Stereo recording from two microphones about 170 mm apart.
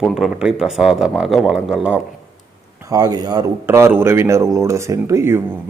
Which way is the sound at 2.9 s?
20° right (ahead or behind).